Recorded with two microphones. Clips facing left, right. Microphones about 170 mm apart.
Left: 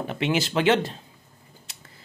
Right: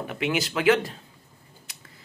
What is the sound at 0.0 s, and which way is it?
Speech, 30° left (ahead or behind).